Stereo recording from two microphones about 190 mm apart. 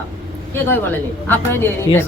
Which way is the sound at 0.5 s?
10° left (ahead or behind).